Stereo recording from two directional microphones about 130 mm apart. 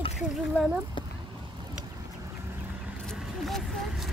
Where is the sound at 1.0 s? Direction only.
40° left (ahead or behind).